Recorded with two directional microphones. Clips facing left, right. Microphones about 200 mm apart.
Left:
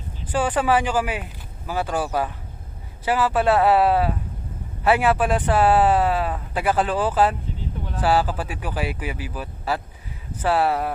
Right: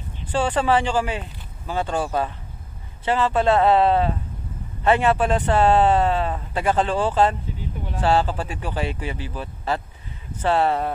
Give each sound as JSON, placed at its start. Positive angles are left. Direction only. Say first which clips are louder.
{"t": 0.3, "sound": "a man's voice", "louder": "even", "side_deg": 10}
{"t": 3.1, "sound": "a man's voice", "louder": "even", "side_deg": 5}